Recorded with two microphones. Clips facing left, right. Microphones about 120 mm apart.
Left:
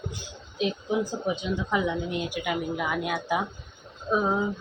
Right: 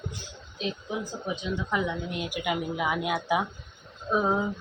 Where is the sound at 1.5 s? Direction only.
5° left (ahead or behind).